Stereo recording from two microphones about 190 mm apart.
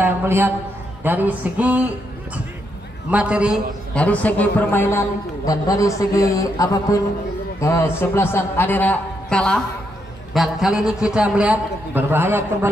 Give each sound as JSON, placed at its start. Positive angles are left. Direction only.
{"t": 0.0, "sound": "a man's voice", "side_deg": -10}
{"t": 1.0, "sound": "a sound", "side_deg": -10}
{"t": 3.1, "sound": "a man's voice", "side_deg": -5}
{"t": 3.9, "sound": "a man's voice", "side_deg": 5}